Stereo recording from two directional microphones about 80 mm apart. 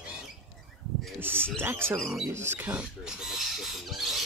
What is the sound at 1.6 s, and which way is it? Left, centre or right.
Speech, right.